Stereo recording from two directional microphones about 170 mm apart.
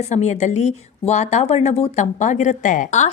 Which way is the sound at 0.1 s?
45° left (ahead or behind).